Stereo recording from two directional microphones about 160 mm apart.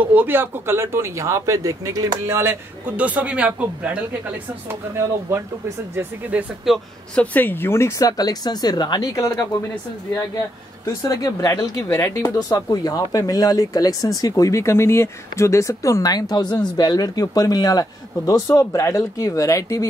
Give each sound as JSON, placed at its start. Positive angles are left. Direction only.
{"t": 0.0, "sound": "speech", "side_deg": -10}
{"t": 6.6, "sound": "a man's voice", "side_deg": 0}
{"t": 7.3, "sound": "speech", "side_deg": 10}
{"t": 11.0, "sound": "speech", "side_deg": 20}